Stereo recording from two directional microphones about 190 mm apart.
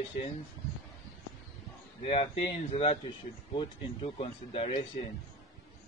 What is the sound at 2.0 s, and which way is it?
Speech, 30° left (ahead or behind).